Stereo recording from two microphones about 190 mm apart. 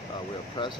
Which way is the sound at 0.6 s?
25° left (ahead or behind).